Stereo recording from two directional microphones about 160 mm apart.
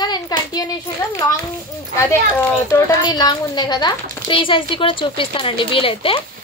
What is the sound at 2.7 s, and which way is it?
A woman's voice, 25° left (ahead or behind).